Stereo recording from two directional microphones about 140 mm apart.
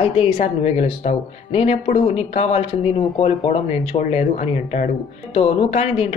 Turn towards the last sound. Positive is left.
turn(degrees=45)  # may be behind; listen again after turning